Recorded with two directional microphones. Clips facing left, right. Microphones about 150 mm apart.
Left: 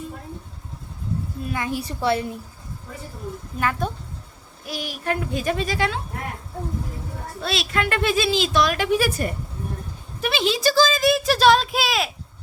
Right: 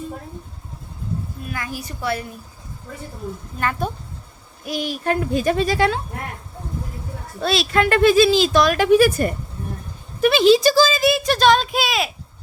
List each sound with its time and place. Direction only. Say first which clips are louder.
1.5 s a woman's voice: left 5 dB; 25° left (ahead or behind)
3.6 s speech: right 1 dB; centre (ahead or behind)
4.6 s a child's voice: right 6 dB; 20° right (ahead or behind)
5.0 s speech: right 4 dB; 35° right (ahead or behind)
7.4 s speech: right 6 dB; 35° right (ahead or behind)
10.2 s a sound: right 8 dB; 50° right (ahead or behind)
10.6 s speech: right 3 dB; 10° right (ahead or behind)